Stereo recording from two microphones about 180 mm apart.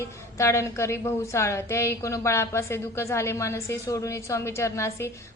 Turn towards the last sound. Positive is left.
turn(degrees=15)  # may be behind; listen again after turning